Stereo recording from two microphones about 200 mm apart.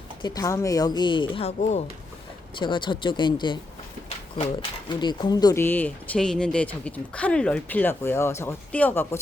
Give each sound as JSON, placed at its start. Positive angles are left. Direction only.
{"t": 0.2, "sound": "speech", "side_deg": 20}
{"t": 4.9, "sound": "speech", "side_deg": 20}